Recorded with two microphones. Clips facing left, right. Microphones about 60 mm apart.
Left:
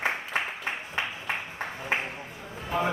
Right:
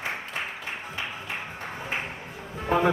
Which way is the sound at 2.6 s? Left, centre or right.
Right.